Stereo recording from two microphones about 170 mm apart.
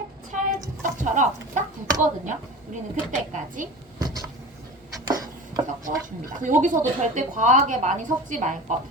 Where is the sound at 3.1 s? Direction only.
45° right (ahead or behind).